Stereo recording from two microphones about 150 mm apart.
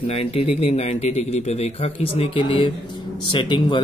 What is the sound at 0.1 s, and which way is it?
A man's voice, 40° left (ahead or behind).